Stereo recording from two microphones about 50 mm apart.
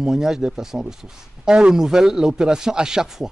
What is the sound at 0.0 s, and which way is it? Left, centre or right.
Speech, centre.